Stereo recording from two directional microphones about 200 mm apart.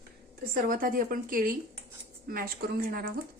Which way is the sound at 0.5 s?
45° right (ahead or behind).